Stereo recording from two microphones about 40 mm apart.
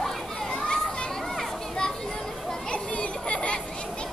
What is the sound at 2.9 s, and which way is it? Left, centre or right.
Children playing, left.